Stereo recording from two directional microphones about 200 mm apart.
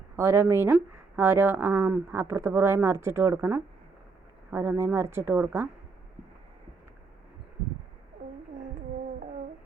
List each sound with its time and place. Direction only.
0.2 s speech: 15° right (ahead or behind)